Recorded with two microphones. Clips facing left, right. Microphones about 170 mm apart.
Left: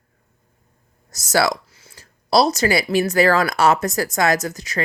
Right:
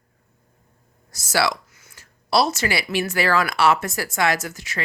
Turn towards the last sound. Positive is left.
turn(degrees=40)  # may be behind; listen again after turning